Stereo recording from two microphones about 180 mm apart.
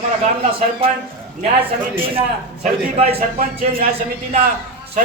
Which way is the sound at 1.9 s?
30° right (ahead or behind).